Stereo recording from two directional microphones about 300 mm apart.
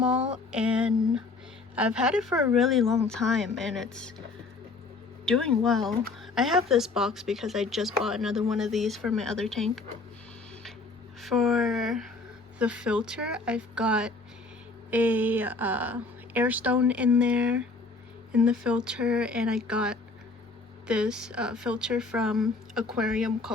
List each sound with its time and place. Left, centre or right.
0.0 s speech: centre
5.2 s speech: centre
11.2 s speech: centre